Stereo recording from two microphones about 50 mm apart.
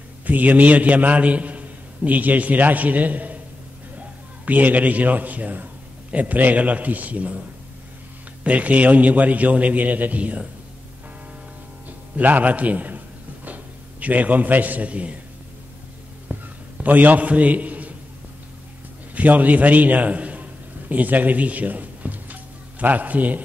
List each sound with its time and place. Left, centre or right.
0.3 s a man's voice: right
4.5 s a man's voice: right
8.5 s a man's voice: right
12.2 s a man's voice: right
16.3 s a sound: right
16.7 s a man's voice: right
19.1 s a man's voice: right